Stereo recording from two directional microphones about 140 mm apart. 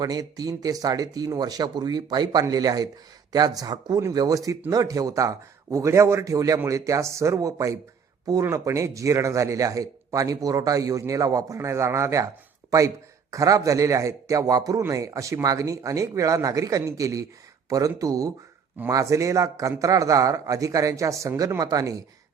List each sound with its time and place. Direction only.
0.0 s speech: 25° right (ahead or behind)
13.3 s speech: 25° right (ahead or behind)